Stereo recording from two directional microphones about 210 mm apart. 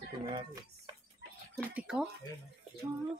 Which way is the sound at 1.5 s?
5° right (ahead or behind).